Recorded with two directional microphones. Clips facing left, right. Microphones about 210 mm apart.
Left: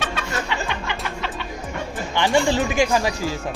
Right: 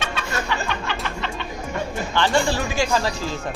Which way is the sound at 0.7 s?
15° left (ahead or behind).